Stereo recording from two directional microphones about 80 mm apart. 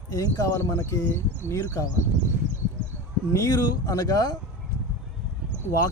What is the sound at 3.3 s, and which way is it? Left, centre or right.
Speech, left.